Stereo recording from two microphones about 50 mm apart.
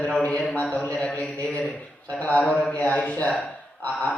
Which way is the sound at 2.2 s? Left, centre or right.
Left.